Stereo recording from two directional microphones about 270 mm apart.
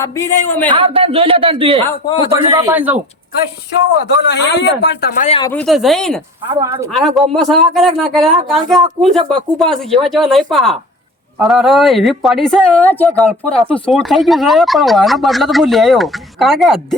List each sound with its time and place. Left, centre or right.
0.0 s a man's voice: centre
0.7 s speech: centre
1.9 s a man's voice: centre
2.3 s speech: centre
4.0 s a man's voice: left
5.4 s speech: centre
6.6 s speech: centre
6.9 s speech: centre